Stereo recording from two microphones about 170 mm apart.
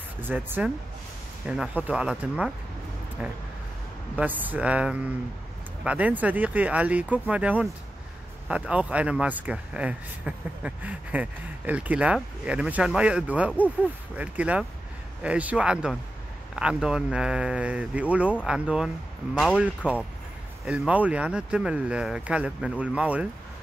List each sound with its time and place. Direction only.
0.2 s speech: 10° right (ahead or behind)